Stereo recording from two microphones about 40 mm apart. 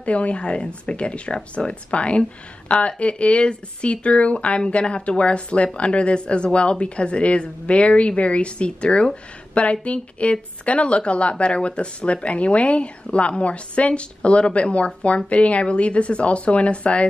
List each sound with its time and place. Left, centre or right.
0.0 s a woman's voice: left